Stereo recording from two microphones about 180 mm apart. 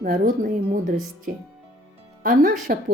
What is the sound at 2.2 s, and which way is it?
Speech, 50° right (ahead or behind).